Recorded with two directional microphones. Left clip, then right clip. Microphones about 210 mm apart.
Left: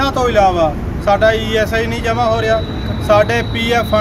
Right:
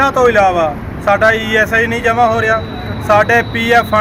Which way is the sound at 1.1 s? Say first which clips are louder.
Right 2 dB; 5° right (ahead or behind).